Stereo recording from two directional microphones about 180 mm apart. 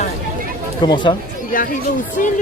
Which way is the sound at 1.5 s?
50° left (ahead or behind).